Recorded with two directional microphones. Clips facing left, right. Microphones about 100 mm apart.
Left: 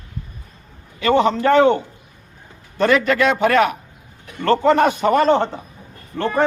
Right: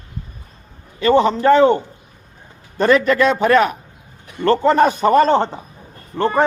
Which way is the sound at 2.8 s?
35° right (ahead or behind).